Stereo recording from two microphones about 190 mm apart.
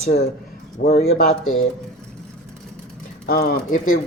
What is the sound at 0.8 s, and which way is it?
Speech, 55° left (ahead or behind).